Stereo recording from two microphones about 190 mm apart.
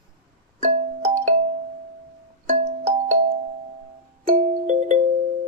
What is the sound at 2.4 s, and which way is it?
Music, 35° right (ahead or behind).